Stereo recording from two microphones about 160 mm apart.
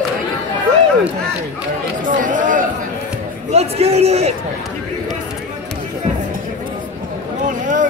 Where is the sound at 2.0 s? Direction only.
55° right (ahead or behind).